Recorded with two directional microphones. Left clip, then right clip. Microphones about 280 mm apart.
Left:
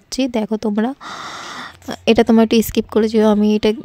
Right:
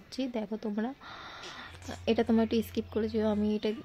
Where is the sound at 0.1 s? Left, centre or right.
Left.